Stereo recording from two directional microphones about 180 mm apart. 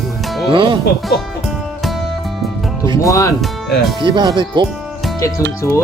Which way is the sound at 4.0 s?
25° right (ahead or behind).